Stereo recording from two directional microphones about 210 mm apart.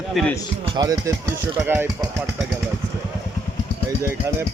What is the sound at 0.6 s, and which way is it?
Speech, 20° right (ahead or behind).